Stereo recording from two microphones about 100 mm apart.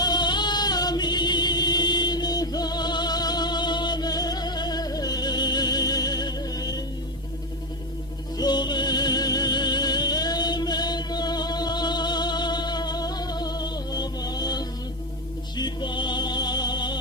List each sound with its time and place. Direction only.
0.0 s music: 45° left (ahead or behind)
8.4 s music: 45° left (ahead or behind)